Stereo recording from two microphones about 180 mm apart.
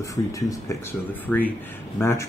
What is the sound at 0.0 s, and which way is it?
A man's voice, 15° left (ahead or behind).